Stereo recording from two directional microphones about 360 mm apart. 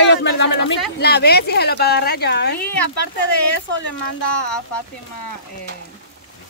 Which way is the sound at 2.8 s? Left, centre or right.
Left.